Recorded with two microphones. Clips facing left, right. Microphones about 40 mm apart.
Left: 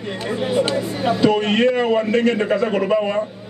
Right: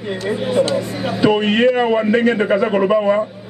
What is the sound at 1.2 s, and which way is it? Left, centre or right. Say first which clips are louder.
A man's voice: right 3 dB; centre.